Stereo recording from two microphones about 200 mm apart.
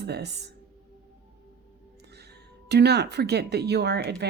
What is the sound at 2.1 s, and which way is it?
Speech, 55° right (ahead or behind).